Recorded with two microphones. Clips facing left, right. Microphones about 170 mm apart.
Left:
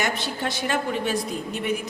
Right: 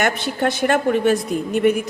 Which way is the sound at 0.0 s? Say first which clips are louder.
Right 7 dB; 55° right (ahead or behind).